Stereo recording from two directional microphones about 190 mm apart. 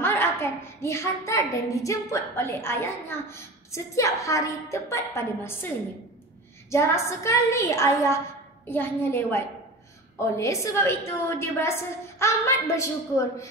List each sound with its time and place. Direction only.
0.0 s a woman's voice: 15° left (ahead or behind)
6.7 s a woman's voice: 15° left (ahead or behind)